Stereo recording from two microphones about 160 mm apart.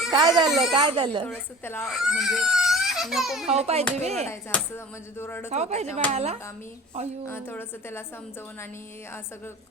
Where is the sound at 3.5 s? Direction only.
40° right (ahead or behind).